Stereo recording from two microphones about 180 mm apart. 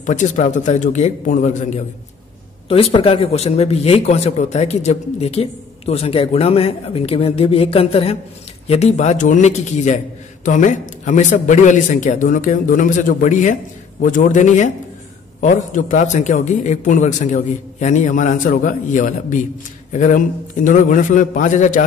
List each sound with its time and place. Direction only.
0.0 s a man's voice: 40° left (ahead or behind)
2.7 s a man's voice: 30° left (ahead or behind)